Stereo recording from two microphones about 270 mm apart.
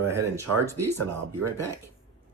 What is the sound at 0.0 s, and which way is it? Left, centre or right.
Speech, centre.